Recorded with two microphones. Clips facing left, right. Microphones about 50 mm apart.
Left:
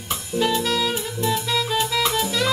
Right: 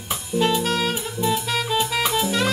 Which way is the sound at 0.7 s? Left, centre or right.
Right.